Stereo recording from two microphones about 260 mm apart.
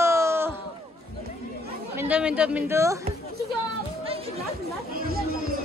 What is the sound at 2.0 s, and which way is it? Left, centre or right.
Speech, centre.